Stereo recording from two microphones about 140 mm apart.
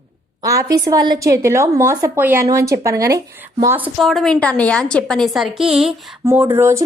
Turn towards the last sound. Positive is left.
turn(degrees=-20)  # may be behind; listen again after turning